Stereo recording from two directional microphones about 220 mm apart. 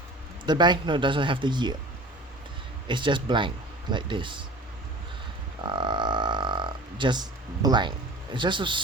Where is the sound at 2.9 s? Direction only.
20° right (ahead or behind).